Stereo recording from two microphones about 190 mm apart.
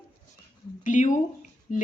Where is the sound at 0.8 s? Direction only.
40° left (ahead or behind).